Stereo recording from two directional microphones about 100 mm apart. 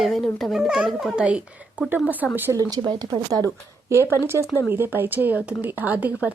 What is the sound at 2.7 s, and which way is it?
Speech, 45° right (ahead or behind).